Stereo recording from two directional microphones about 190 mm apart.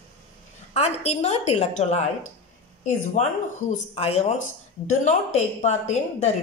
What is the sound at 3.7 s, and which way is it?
A woman's voice, 30° left (ahead or behind).